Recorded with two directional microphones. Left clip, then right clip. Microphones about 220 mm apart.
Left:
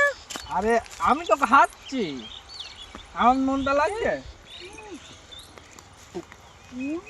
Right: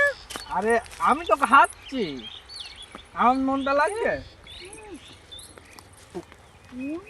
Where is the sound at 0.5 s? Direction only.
5° left (ahead or behind).